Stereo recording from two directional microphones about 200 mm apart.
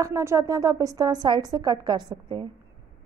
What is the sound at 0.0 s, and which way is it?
A woman's voice, 15° right (ahead or behind).